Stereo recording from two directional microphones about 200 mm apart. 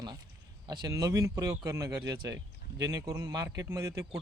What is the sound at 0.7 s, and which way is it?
Speech, 20° right (ahead or behind).